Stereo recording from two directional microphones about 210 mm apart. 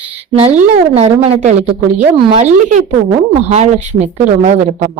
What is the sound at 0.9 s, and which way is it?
A woman's voice, 30° right (ahead or behind).